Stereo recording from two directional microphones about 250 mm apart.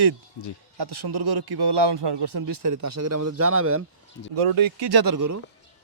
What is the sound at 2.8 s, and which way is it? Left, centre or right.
Speech, right.